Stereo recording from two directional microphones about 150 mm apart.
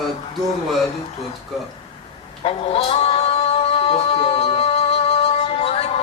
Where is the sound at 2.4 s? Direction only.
40° left (ahead or behind).